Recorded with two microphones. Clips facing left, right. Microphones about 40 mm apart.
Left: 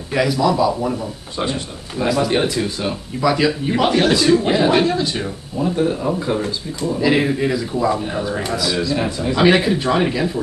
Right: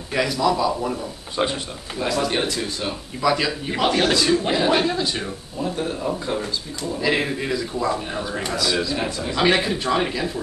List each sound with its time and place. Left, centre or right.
0.1 s a man's voice: centre
1.3 s speech: centre
2.0 s a man's voice: centre
6.4 s speech: left
7.0 s a man's voice: centre